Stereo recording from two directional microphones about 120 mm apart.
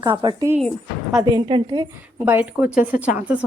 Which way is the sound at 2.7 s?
90° left.